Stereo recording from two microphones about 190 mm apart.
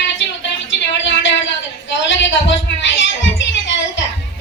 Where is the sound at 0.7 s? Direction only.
75° left (ahead or behind).